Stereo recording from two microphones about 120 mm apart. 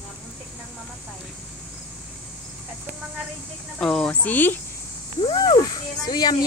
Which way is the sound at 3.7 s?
5° left (ahead or behind).